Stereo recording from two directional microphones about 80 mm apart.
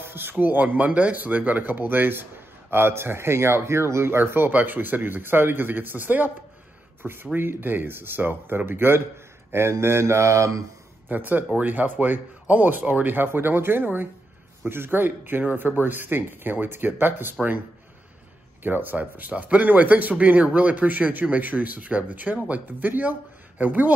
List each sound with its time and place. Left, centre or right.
0.0 s speech: right
11.1 s speech: right
18.6 s speech: right